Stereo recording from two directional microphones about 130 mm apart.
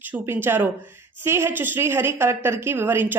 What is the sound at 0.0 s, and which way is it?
A woman's voice, 15° right (ahead or behind).